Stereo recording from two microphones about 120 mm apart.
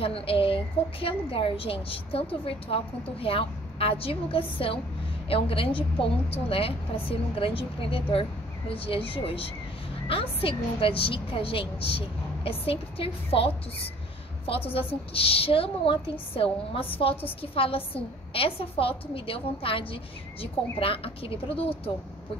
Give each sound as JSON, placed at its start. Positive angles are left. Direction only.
{"t": 0.0, "sound": "a woman's voice", "side_deg": 50}
{"t": 15.1, "sound": "a woman's voice", "side_deg": 50}